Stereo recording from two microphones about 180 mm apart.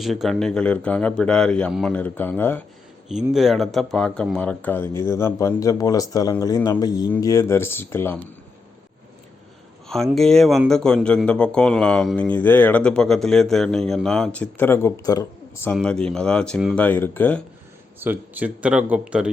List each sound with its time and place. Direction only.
0.0 s a man's voice: centre (ahead or behind)
3.3 s speech: centre (ahead or behind)
10.2 s a man's voice: centre (ahead or behind); by 15.7 s 20° left (ahead or behind)
15.7 s a man's voice: 5° left (ahead or behind)
18.0 s speech: 10° right (ahead or behind)